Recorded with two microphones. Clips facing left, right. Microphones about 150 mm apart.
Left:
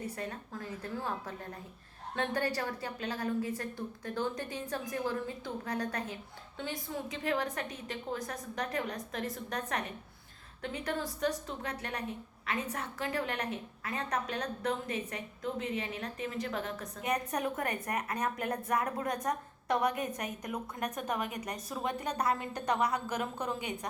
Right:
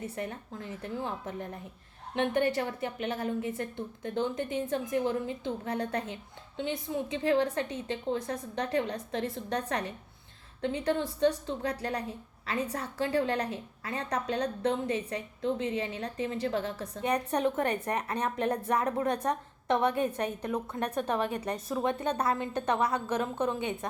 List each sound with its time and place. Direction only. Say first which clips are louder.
0.0 s a woman's voice: right 3 dB; 25° right (ahead or behind)